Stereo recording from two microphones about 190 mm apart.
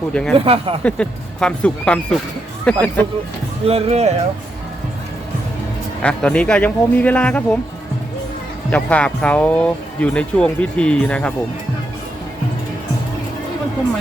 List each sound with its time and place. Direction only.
0.1 s speech: 5° left (ahead or behind)
0.4 s speech: 30° right (ahead or behind)
0.8 s speech: 5° left (ahead or behind)
3.7 s speech: 35° right (ahead or behind)
6.0 s speech: 5° left (ahead or behind)
8.7 s speech: 5° left (ahead or behind)